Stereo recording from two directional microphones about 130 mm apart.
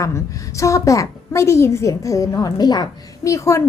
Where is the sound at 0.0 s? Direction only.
25° left (ahead or behind).